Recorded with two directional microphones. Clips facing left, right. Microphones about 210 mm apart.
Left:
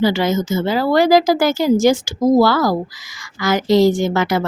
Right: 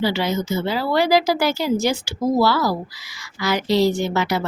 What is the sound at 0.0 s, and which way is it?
Speech, 45° left (ahead or behind).